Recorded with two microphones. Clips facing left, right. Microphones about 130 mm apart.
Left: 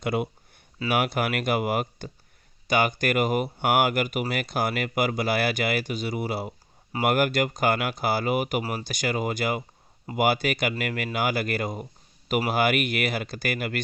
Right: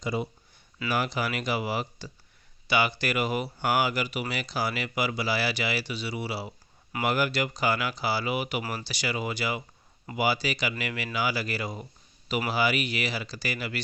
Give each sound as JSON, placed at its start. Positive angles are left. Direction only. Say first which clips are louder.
{"t": 0.0, "sound": "speech", "louder": "left 4 dB", "side_deg": 60}